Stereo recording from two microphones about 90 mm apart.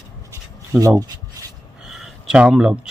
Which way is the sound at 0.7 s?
15° right (ahead or behind).